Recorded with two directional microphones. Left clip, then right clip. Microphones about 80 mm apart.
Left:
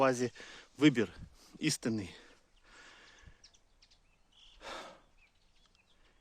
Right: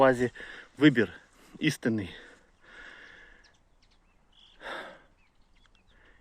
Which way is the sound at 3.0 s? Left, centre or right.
Left.